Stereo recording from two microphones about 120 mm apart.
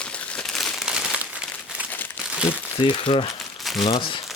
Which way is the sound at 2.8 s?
45° left (ahead or behind).